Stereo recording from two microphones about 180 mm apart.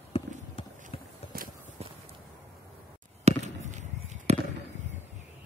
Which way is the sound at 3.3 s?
40° right (ahead or behind).